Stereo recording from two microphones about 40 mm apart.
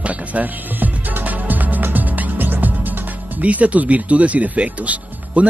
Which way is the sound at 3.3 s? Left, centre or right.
Right.